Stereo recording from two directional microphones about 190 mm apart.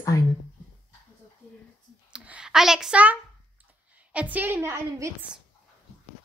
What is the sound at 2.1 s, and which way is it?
A woman's voice, 5° right (ahead or behind).